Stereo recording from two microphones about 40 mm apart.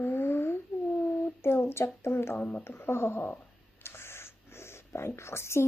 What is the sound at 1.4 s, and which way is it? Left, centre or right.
Speech, left.